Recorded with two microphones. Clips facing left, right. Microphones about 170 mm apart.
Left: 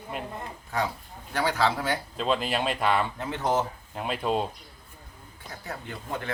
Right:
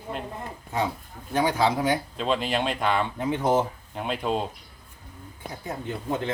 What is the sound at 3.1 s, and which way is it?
Speech, 15° right (ahead or behind).